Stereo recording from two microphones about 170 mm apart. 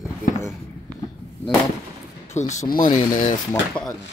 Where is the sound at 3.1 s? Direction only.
50° left (ahead or behind).